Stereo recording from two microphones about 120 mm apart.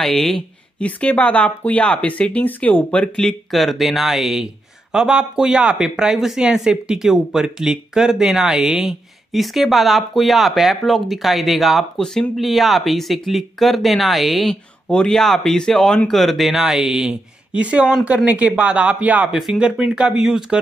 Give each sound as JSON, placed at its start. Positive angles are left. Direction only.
{"t": 0.0, "sound": "speech", "side_deg": 5}